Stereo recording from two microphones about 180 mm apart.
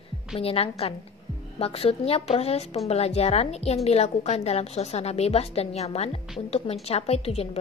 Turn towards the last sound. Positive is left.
turn(degrees=35)  # may be behind; listen again after turning